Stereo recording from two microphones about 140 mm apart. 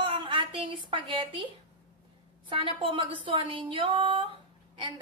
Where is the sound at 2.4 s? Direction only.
40° right (ahead or behind).